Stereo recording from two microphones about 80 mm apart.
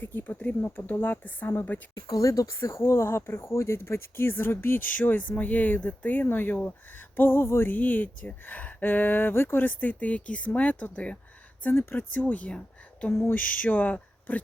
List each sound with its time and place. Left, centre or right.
0.0 s speech: left
2.0 s speech: left; by 11.2 s centre
11.7 s speech: left; by 13.1 s centre
13.1 s a sound: left
13.3 s speech: centre